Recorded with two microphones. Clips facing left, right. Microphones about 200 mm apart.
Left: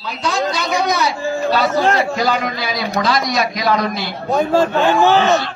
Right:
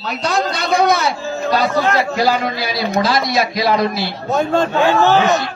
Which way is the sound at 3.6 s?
30° right (ahead or behind).